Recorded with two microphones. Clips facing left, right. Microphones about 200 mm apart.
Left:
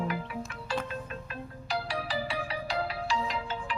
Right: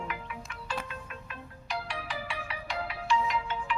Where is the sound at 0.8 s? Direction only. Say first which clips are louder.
Left 5 dB; 35° left (ahead or behind).